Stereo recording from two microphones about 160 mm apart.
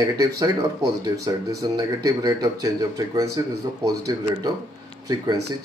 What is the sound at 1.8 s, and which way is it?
A man's voice, 25° right (ahead or behind).